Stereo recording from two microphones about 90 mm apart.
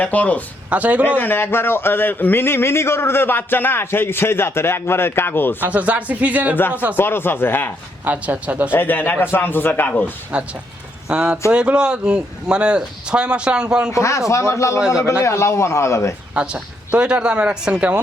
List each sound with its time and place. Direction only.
0.0 s speech: 15° left (ahead or behind)
0.7 s speech: 15° right (ahead or behind)
1.2 s speech: 25° left (ahead or behind)
5.5 s speech: 15° right (ahead or behind)
6.6 s speech: 25° left (ahead or behind)
8.0 s speech: 20° right (ahead or behind)
8.7 s speech: 20° left (ahead or behind)
10.3 s speech: 10° right (ahead or behind)
13.9 s a man's voice: 35° left (ahead or behind)
16.3 s speech: 10° right (ahead or behind)